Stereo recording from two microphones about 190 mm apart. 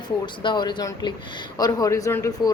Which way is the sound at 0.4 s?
25° left (ahead or behind).